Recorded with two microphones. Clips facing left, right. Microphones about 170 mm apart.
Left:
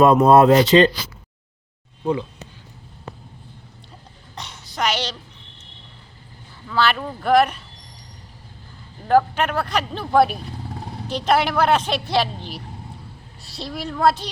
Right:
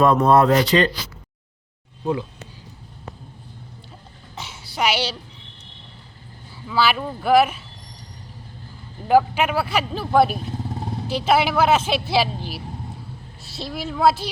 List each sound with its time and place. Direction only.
0.0 s speech: 20° left (ahead or behind)
2.0 s speech: centre (ahead or behind)
4.4 s a sound: 5° right (ahead or behind)
6.7 s speech: 5° right (ahead or behind)
9.0 s speech: 10° right (ahead or behind)